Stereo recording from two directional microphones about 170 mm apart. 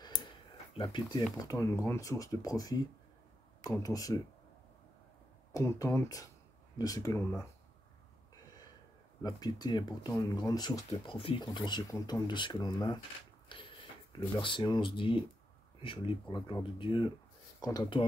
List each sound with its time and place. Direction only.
0.8 s speech: 25° left (ahead or behind)
5.5 s speech: 20° left (ahead or behind)
9.2 s speech: 25° left (ahead or behind)
13.5 s a sound: 30° left (ahead or behind)
14.4 s speech: 30° left (ahead or behind)